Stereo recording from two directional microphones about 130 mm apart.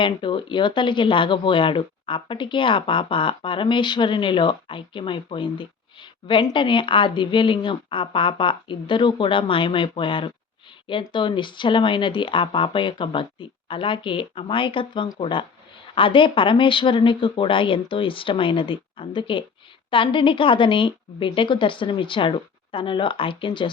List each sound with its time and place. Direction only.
0.0 s speech: 40° left (ahead or behind)